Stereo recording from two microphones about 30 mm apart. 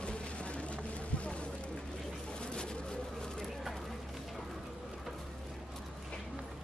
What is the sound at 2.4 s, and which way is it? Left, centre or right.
Pigeon, left.